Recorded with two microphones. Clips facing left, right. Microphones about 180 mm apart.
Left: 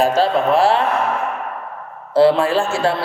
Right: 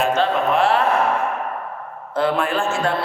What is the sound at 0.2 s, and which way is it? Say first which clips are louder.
Speech: left 3 dB; 30° left (ahead or behind).